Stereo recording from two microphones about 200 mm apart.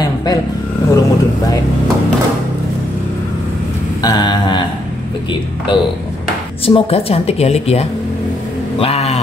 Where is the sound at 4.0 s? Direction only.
20° left (ahead or behind).